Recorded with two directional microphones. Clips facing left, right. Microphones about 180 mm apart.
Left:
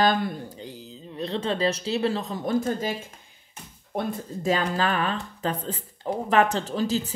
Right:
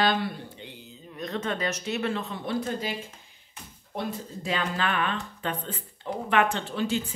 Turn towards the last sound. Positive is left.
turn(degrees=35)  # may be behind; listen again after turning